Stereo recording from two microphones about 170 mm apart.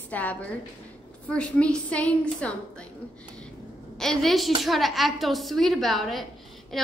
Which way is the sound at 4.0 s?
Centre (ahead or behind).